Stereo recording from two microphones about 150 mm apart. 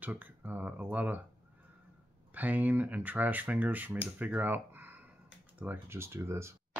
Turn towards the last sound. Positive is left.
turn(degrees=-20)  # may be behind; listen again after turning